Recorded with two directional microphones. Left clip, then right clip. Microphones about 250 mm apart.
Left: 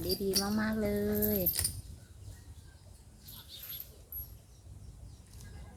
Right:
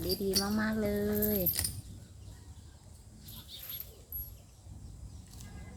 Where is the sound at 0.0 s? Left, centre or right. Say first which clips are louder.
Even; centre.